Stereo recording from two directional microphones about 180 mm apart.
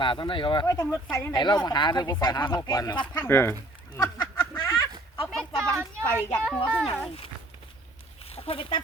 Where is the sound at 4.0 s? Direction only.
20° left (ahead or behind).